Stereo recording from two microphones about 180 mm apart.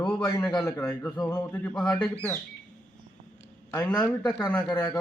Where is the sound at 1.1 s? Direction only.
20° left (ahead or behind).